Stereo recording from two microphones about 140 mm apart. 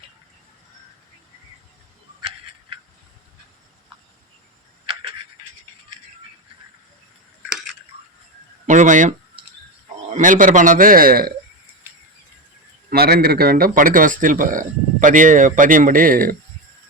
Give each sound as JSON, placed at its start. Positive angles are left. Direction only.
{"t": 8.6, "sound": "speech", "side_deg": -60}
{"t": 12.9, "sound": "speech", "side_deg": -90}